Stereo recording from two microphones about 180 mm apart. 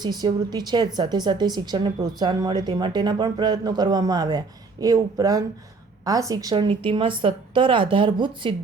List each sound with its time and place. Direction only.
0.0 s speech: 25° right (ahead or behind)